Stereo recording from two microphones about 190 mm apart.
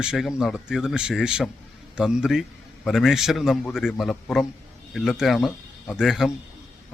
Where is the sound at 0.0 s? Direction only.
5° right (ahead or behind).